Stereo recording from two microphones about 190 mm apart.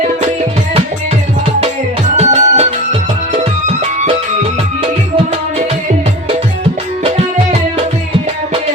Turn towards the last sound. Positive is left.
turn(degrees=-35)  # may be behind; listen again after turning